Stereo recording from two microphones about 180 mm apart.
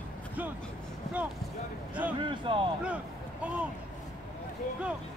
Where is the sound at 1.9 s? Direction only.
10° right (ahead or behind).